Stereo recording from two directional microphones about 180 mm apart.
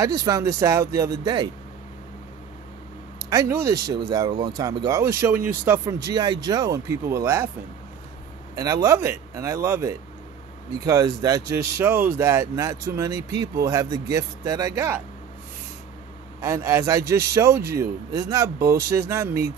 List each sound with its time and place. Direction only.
0.0 s speech: 20° right (ahead or behind)
3.3 s speech: 15° right (ahead or behind)
8.8 s speech: 15° right (ahead or behind)
16.3 s speech: 15° right (ahead or behind)